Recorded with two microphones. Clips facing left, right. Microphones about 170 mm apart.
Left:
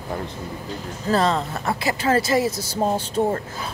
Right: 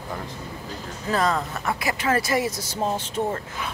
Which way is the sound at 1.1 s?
30° left (ahead or behind).